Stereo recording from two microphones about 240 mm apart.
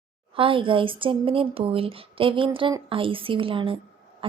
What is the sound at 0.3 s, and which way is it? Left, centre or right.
A woman's voice, right.